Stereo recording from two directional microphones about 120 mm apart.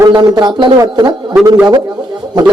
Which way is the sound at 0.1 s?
35° right (ahead or behind).